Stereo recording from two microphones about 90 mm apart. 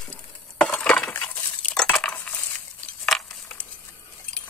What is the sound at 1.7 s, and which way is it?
Cutlery, 10° left (ahead or behind).